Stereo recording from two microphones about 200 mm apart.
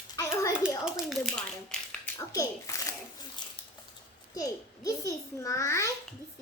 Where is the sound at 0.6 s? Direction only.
Centre (ahead or behind).